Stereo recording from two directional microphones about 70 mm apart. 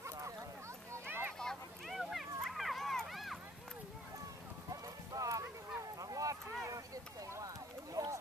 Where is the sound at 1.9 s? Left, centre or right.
Centre.